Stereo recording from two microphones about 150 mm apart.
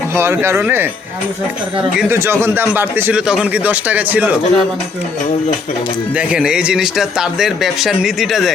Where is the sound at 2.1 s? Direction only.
15° right (ahead or behind).